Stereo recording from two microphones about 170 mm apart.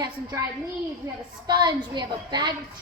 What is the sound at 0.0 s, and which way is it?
Speech, 25° right (ahead or behind).